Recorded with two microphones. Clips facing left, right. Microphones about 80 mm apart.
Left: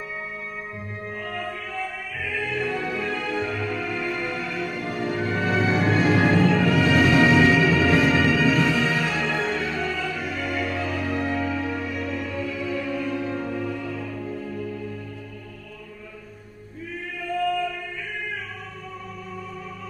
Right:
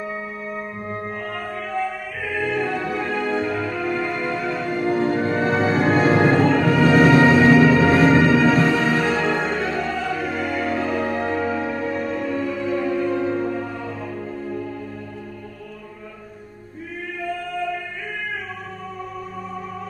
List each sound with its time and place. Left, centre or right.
2.4 s music: right